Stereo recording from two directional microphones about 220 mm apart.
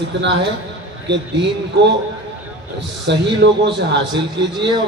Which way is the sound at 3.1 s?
55° right (ahead or behind).